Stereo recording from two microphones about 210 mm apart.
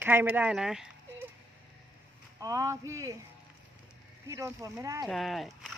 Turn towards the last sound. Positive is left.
turn(degrees=0)  # may be behind; listen again after turning